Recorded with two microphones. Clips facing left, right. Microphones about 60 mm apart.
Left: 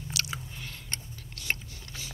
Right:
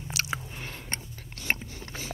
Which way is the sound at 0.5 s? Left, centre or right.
Right.